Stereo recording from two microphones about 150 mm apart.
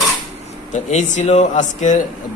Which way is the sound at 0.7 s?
50° left (ahead or behind).